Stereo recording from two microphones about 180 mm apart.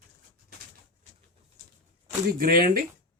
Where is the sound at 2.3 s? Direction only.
55° right (ahead or behind).